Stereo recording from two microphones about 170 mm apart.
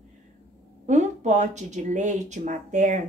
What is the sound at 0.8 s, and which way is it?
Speech, 45° right (ahead or behind).